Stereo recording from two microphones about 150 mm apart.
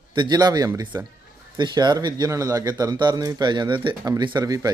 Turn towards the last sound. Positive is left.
turn(degrees=-25)  # may be behind; listen again after turning